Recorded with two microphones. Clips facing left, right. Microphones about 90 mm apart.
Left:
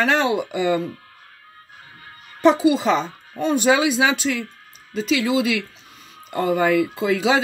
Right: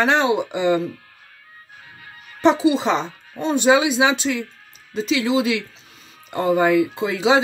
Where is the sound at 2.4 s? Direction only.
25° right (ahead or behind).